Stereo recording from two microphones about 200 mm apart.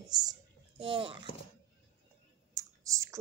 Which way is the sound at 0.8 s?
25° right (ahead or behind).